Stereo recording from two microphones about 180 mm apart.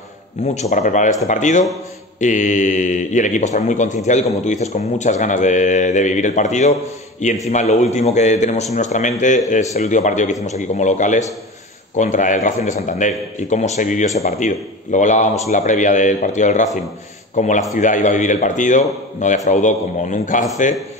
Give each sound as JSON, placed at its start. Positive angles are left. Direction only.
{"t": 0.6, "sound": "a man's voice", "side_deg": 40}